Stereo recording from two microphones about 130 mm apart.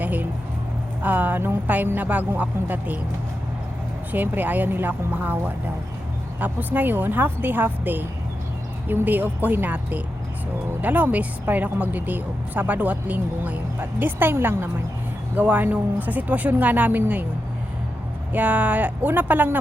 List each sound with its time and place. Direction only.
0.0 s a sound: 15° right (ahead or behind)
1.0 s speech: 15° right (ahead or behind)
4.1 s speech: 15° right (ahead or behind)
6.4 s speech: 15° right (ahead or behind)
18.3 s speech: 10° right (ahead or behind)